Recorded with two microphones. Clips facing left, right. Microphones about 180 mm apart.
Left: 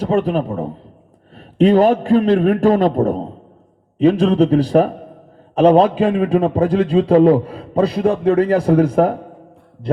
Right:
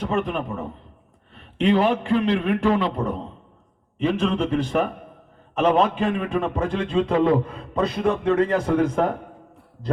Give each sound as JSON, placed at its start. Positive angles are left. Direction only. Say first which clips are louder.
{"t": 0.0, "sound": "a man's voice", "louder": "left 7 dB", "side_deg": 35}